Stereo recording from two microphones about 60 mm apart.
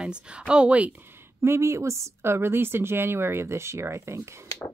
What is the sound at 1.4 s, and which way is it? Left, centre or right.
A woman's voice, right.